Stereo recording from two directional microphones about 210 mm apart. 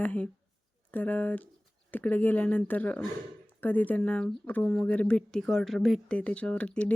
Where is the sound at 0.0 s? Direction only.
10° left (ahead or behind).